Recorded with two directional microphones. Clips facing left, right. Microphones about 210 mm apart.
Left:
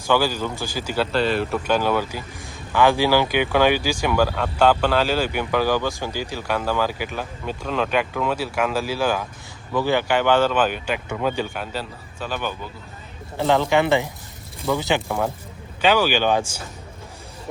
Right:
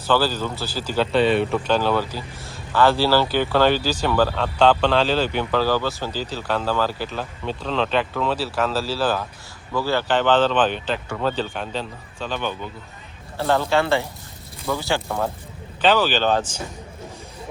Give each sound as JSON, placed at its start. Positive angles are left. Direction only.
{"t": 0.1, "sound": "speech", "side_deg": 10}
{"t": 1.1, "sound": "speech", "side_deg": 0}